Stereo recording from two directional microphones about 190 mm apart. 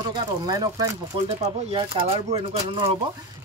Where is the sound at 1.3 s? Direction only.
30° right (ahead or behind).